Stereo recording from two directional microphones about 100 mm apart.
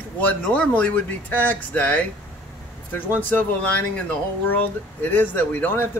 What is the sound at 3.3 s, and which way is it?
A man's voice, 15° left (ahead or behind).